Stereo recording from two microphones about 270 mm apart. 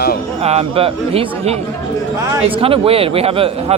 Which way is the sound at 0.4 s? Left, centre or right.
Right.